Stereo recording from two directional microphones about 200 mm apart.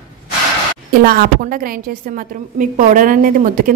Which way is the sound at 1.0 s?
45° right (ahead or behind).